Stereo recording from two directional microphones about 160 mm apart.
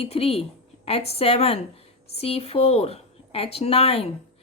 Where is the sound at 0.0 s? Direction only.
40° left (ahead or behind).